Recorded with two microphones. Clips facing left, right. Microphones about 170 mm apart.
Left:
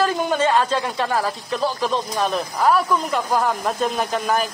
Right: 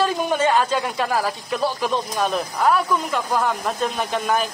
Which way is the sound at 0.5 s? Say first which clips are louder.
Even; 5° right (ahead or behind).